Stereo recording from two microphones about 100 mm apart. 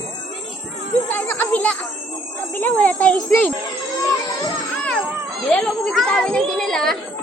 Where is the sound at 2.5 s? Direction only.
15° left (ahead or behind).